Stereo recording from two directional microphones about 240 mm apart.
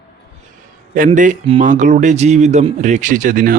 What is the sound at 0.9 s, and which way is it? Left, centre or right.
Speech, right.